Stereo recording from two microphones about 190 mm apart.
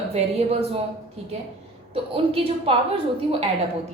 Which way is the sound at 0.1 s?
35° right (ahead or behind).